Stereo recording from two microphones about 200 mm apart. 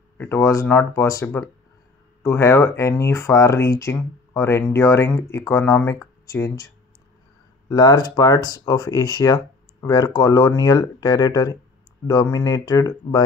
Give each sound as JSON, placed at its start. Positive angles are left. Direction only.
{"t": 0.2, "sound": "speech", "side_deg": 10}